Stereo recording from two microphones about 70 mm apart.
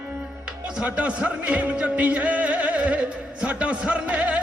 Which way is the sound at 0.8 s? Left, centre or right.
Centre.